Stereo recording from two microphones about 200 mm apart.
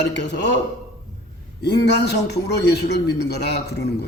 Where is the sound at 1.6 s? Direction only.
55° left (ahead or behind).